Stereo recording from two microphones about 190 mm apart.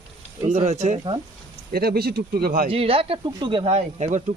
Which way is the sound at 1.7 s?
55° right (ahead or behind).